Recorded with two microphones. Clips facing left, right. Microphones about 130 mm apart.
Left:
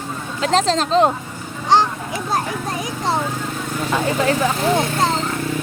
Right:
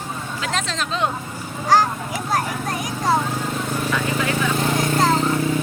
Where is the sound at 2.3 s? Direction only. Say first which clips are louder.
Even; 25° left (ahead or behind).